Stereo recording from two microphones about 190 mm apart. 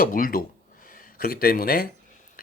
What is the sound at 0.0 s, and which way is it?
A man's voice, 45° left (ahead or behind).